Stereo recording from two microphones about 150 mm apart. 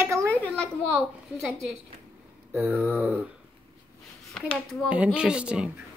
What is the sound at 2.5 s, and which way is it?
Speech, 15° right (ahead or behind).